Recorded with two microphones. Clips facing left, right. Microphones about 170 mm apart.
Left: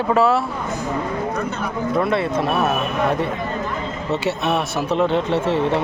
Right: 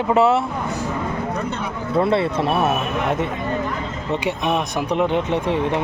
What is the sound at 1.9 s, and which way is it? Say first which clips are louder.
Speech: right 2 dB; 25° right (ahead or behind).